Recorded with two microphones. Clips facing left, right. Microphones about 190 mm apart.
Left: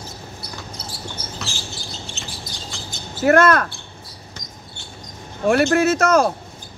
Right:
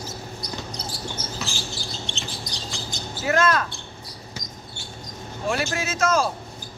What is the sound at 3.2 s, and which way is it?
Speech, 60° left (ahead or behind).